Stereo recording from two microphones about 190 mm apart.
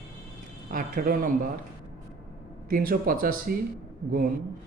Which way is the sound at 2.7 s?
50° right (ahead or behind).